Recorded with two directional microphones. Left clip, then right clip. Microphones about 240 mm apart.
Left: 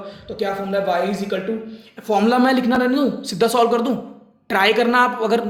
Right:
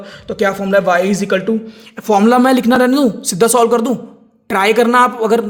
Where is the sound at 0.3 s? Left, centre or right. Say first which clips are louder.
Right 8 dB; right.